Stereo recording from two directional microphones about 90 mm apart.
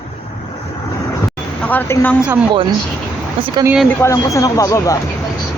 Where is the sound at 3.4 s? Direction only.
80° right.